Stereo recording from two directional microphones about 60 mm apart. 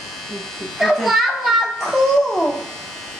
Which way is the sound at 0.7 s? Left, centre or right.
Centre.